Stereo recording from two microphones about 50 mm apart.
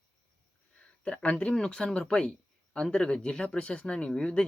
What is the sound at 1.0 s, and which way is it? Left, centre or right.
Speech, left.